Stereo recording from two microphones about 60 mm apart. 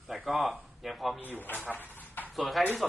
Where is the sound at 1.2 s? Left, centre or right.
Left.